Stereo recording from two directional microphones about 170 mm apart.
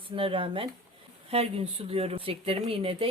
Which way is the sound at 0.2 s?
30° right (ahead or behind).